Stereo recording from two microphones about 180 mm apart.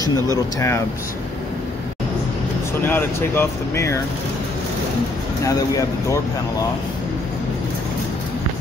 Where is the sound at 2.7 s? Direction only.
10° left (ahead or behind).